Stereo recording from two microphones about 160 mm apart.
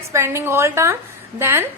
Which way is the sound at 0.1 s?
15° right (ahead or behind).